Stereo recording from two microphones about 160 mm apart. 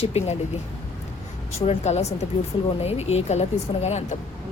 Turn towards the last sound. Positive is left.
turn(degrees=45)  # may be behind; listen again after turning